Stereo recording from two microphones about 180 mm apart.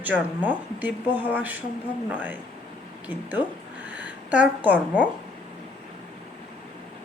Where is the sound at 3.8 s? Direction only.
10° right (ahead or behind).